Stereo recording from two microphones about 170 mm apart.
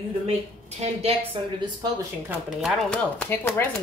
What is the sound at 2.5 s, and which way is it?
Speech, centre (ahead or behind).